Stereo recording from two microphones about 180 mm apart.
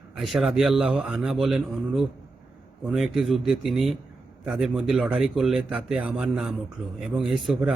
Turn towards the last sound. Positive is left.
turn(degrees=-5)  # may be behind; listen again after turning